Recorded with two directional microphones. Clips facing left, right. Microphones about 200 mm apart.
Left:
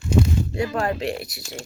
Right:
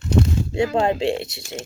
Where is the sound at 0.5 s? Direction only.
25° right (ahead or behind).